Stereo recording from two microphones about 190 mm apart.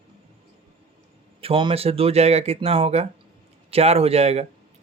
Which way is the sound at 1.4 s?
25° right (ahead or behind).